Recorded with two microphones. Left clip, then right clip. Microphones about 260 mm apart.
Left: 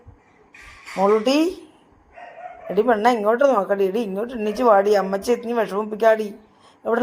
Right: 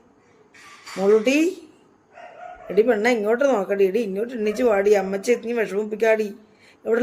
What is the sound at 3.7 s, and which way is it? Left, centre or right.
Speech, left.